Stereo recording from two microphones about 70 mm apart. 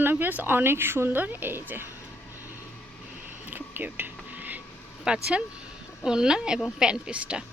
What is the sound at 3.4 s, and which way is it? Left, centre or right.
Whispering, right.